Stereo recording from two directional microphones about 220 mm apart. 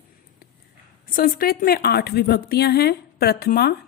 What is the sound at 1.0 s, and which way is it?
A woman's voice, 40° left (ahead or behind).